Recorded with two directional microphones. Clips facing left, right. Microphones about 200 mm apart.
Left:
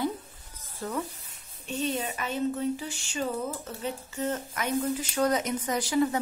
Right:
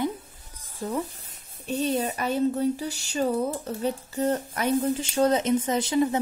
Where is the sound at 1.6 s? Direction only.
40° right (ahead or behind).